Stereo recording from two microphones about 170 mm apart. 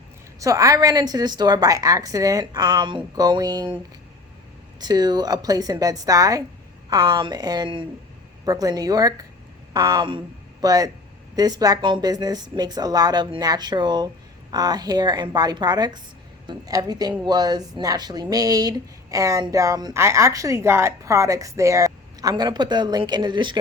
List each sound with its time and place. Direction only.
0.3 s a woman's voice: 20° right (ahead or behind)
4.8 s a woman's voice: 25° right (ahead or behind)